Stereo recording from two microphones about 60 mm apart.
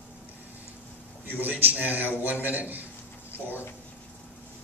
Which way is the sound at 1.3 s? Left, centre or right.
Right.